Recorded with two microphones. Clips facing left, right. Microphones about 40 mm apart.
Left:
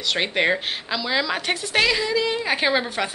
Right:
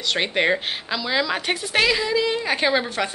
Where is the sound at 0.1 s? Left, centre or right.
Centre.